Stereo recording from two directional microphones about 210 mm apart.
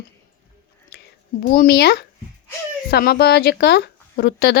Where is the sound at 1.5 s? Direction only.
50° left (ahead or behind).